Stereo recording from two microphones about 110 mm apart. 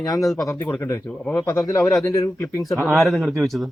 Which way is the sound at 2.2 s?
25° left (ahead or behind).